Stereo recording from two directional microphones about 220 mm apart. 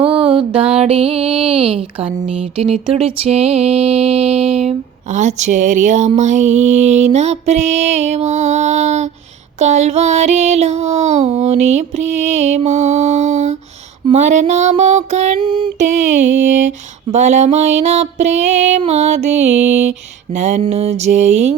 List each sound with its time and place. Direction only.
0.5 s speech: 25° right (ahead or behind)
2.6 s music: 25° right (ahead or behind)
12.5 s mantra: 30° right (ahead or behind)
14.0 s music: 30° right (ahead or behind)
20.3 s speech: 30° right (ahead or behind)